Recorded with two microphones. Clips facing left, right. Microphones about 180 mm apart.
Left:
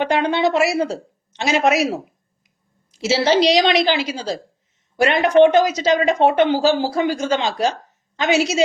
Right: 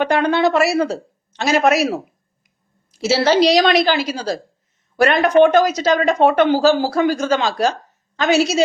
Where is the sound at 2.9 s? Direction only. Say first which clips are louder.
Right 1 dB; 20° left (ahead or behind).